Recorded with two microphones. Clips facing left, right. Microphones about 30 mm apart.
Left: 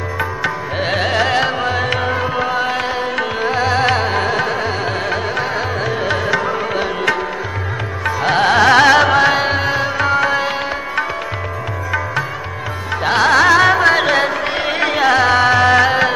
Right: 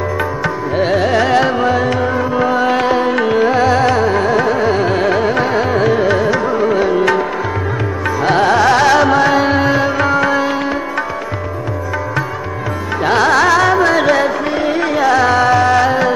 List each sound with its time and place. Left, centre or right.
0.7 s carnatic music: left
1.1 s carnatic music: centre
2.0 s music: left
2.3 s music: centre
2.7 s music: centre
3.8 s music: left
4.4 s carnatic music: left; by 5.9 s centre
5.9 s music: centre
8.4 s music: left
13.0 s music: centre
13.6 s music: left
14.5 s music: left
15.0 s music: left